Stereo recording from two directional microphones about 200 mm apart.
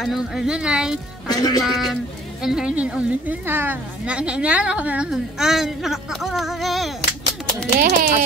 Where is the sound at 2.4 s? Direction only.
5° right (ahead or behind).